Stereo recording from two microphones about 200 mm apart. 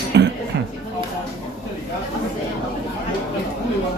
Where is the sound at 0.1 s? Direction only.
60° right (ahead or behind).